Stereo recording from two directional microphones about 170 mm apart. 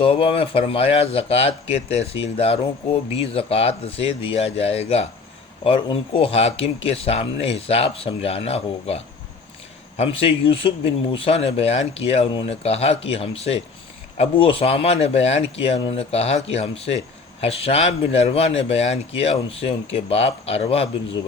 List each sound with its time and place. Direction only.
0.0 s speech: 30° left (ahead or behind)